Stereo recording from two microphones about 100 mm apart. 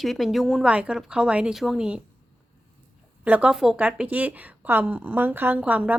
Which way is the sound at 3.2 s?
15° right (ahead or behind).